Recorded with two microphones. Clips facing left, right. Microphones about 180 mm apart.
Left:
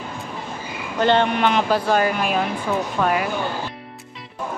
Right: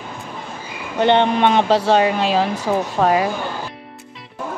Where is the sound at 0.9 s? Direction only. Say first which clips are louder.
Right 3 dB; 20° right (ahead or behind).